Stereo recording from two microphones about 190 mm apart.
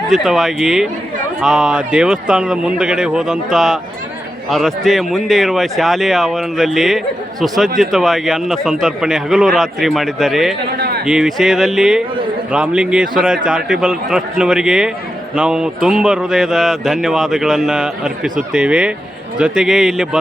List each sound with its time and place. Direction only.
0.1 s speech: centre (ahead or behind)
10.8 s a sound: 55° right (ahead or behind)
11.0 s speech: 5° right (ahead or behind)